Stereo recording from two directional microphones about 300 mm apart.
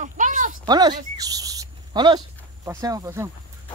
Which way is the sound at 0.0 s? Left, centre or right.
Right.